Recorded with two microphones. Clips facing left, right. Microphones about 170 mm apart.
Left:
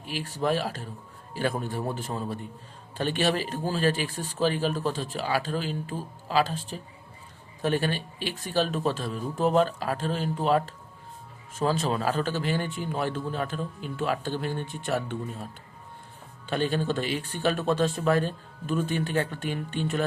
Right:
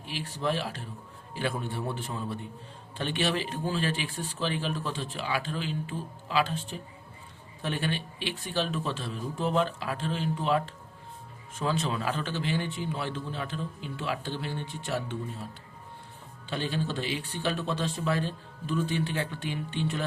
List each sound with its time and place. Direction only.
0.0 s a man's voice: 45° left (ahead or behind)
16.5 s a man's voice: 50° left (ahead or behind)